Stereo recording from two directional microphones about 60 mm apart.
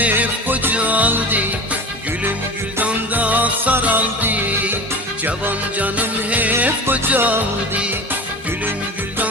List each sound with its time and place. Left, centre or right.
0.1 s music: right
2.8 s music: right